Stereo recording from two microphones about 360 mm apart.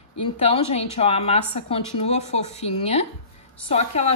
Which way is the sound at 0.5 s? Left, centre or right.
Centre.